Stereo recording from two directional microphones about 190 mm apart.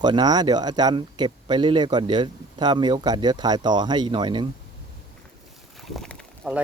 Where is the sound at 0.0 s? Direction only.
20° right (ahead or behind).